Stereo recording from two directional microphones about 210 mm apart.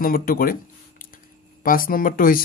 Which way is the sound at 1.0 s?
40° left (ahead or behind).